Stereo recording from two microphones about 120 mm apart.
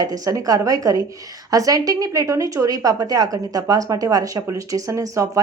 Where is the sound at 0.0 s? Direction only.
30° right (ahead or behind).